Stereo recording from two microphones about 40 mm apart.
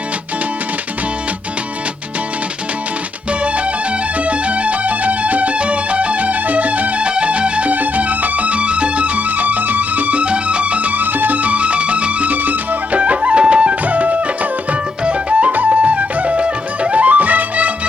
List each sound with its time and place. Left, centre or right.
4.3 s music: right